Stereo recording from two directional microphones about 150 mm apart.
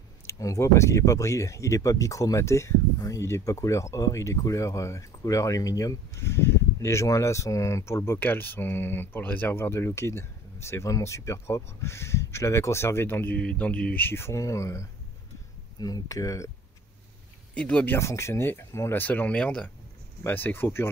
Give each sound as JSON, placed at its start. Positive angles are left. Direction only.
{"t": 0.3, "sound": "speech", "side_deg": 20}
{"t": 17.6, "sound": "speech", "side_deg": 5}